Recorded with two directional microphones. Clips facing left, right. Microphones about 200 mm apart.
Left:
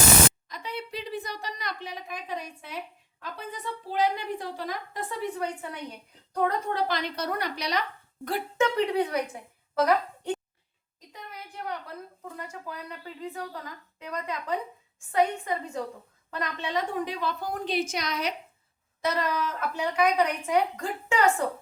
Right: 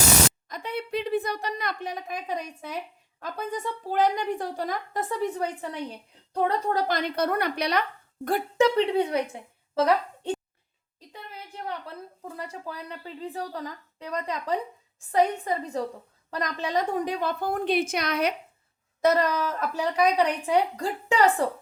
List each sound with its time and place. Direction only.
0.4 s a woman's voice: 50° right (ahead or behind)
6.3 s a woman's voice: 30° right (ahead or behind)
6.8 s a woman's voice: 50° right (ahead or behind)
8.5 s a woman's voice: 30° right (ahead or behind)
11.1 s a sound: 30° right (ahead or behind)
12.4 s a woman's voice: 35° right (ahead or behind); by 18.3 s 55° right (ahead or behind)
19.0 s a woman's voice: 45° right (ahead or behind)